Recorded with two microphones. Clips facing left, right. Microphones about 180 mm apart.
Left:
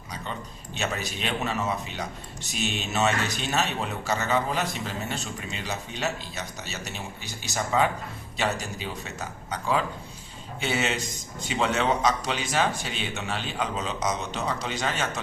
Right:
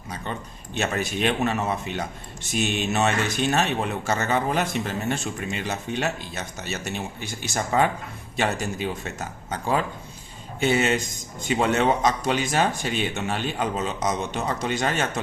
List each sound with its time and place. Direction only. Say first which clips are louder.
0.1 s a man's voice: right 3 dB; 50° right (ahead or behind)